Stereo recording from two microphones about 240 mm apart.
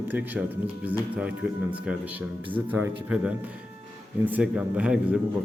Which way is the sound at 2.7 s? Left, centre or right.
Centre.